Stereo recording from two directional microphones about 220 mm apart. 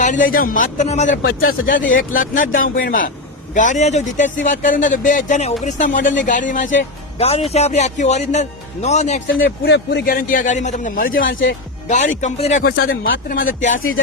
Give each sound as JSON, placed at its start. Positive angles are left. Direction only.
{"t": 0.0, "sound": "speech", "side_deg": 35}
{"t": 9.3, "sound": "speech", "side_deg": 45}
{"t": 13.7, "sound": "a sound", "side_deg": 65}